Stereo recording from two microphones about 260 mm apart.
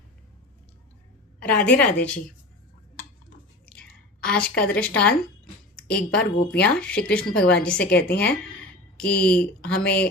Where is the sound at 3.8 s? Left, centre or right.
Centre.